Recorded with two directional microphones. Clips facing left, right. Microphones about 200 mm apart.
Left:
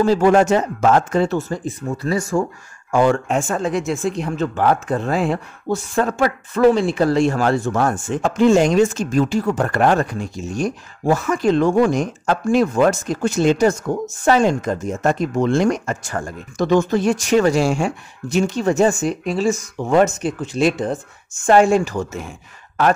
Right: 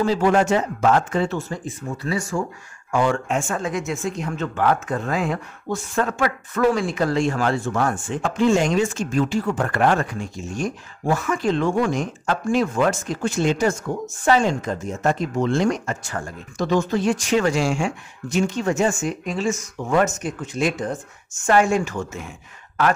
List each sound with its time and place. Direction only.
0.0 s speech: 45° left (ahead or behind)